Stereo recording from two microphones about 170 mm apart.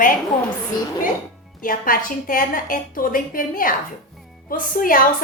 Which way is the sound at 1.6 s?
55° left (ahead or behind).